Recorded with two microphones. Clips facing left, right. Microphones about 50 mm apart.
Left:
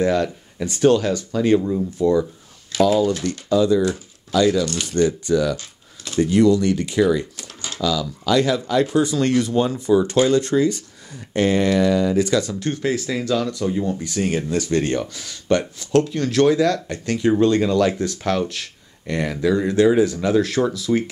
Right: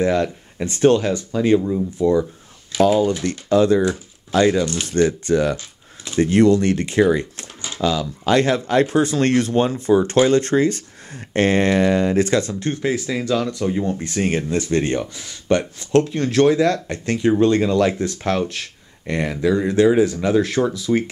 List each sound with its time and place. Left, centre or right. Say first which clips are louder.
0.0 s speech: right 1 dB; right
0.7 s speech: right 1 dB; right
1.3 s speech: right 1 dB; centre
1.6 s speech: right 1 dB; centre
2.0 s speech: even; centre
3.3 s speech: right 2 dB; right
4.3 s speech: right 1 dB; right
12.8 s speech: right 1 dB; centre
13.8 s speech: right 1 dB; right; by 15.6 s centre
15.8 s speech: right 1 dB; right
18.5 s a sound: right 1 dB; right
19.2 s speech: right 1 dB; centre
20.2 s speech: right 1 dB; right